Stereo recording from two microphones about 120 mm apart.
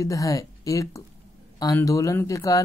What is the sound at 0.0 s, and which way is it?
Speech, 25° left (ahead or behind).